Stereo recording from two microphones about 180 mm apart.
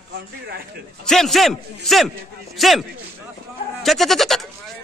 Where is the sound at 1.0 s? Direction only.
Centre (ahead or behind).